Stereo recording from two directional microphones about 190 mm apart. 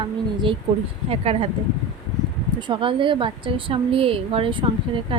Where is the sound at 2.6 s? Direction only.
25° right (ahead or behind).